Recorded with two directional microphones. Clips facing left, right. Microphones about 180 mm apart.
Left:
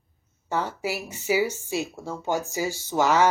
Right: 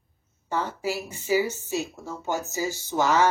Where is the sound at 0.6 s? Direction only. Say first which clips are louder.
Even; 10° left (ahead or behind).